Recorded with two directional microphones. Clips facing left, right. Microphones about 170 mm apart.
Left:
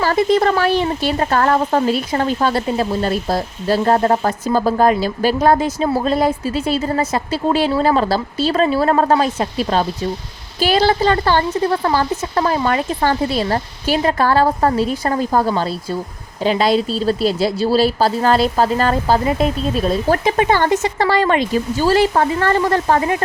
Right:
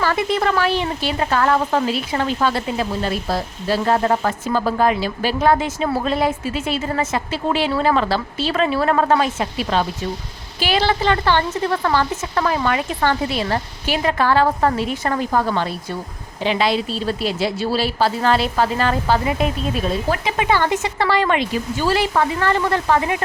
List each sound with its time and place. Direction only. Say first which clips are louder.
0.0 s a woman's voice: left 5 dB; 40° left (ahead or behind)